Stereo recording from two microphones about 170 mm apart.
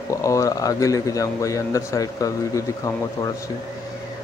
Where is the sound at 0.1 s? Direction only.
20° left (ahead or behind).